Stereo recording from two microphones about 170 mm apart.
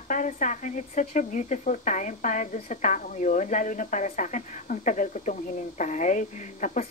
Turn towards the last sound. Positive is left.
turn(degrees=45)  # may be behind; listen again after turning